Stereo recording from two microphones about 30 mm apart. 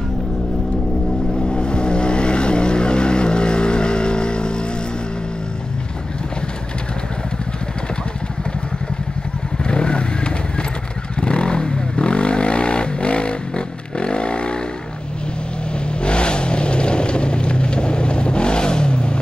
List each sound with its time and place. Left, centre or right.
1.5 s vehicle: left
9.6 s vehicle: left
16.0 s vehicle: left